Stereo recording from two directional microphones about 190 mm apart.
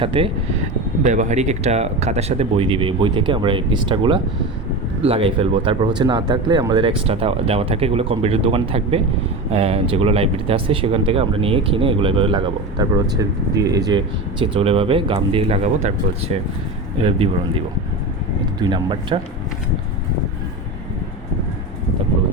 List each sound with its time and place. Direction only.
0.0 s speech: 30° right (ahead or behind)
1.0 s speech: 40° right (ahead or behind)
17.0 s speech: 30° right (ahead or behind)
18.6 s speech: 25° right (ahead or behind)